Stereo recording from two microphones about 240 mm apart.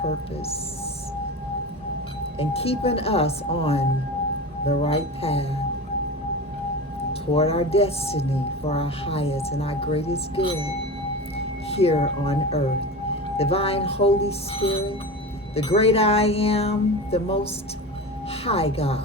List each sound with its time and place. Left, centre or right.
2.4 s speech: left
7.1 s speech: left
11.7 s speech: left